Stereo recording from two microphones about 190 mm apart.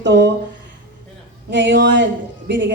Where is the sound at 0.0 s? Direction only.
65° right (ahead or behind).